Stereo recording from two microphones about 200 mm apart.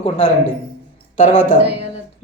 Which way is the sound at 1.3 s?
80° left.